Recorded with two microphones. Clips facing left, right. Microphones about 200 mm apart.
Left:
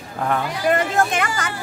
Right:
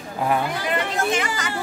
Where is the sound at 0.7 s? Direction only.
55° left (ahead or behind).